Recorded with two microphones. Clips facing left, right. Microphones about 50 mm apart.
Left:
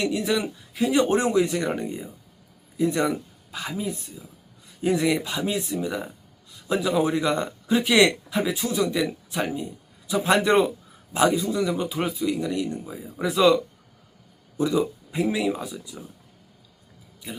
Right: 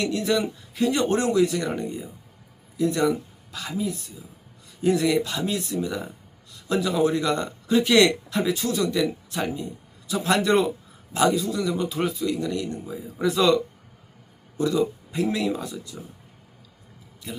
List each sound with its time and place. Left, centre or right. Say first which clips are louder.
0.0 s speech: right 1 dB; centre
1.0 s speech: even; centre
4.8 s speech: right 1 dB; centre
14.6 s speech: even; centre